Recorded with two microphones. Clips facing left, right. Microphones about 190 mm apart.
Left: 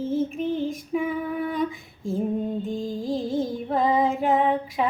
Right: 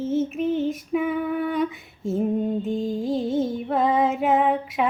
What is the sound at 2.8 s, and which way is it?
Music, 25° right (ahead or behind).